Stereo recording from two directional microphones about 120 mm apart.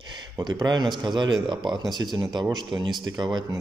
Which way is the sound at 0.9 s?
40° right (ahead or behind).